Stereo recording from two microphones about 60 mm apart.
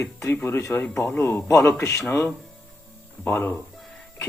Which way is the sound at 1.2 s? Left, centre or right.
Left.